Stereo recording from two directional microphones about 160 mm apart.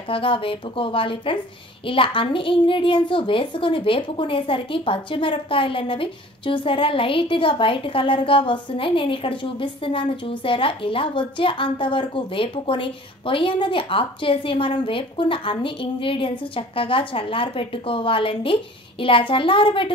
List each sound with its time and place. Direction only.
0.1 s a woman's voice: 35° left (ahead or behind)